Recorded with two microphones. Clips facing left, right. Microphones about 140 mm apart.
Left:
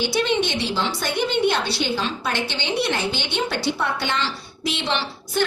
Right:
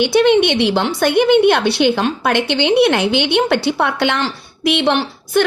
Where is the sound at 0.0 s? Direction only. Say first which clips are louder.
Right 10 dB; 65° right (ahead or behind).